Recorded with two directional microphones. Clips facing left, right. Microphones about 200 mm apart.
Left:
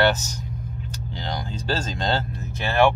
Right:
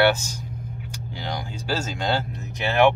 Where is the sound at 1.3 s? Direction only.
10° right (ahead or behind).